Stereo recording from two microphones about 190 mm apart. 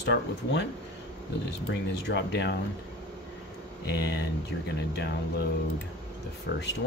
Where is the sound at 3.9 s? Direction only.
60° left (ahead or behind).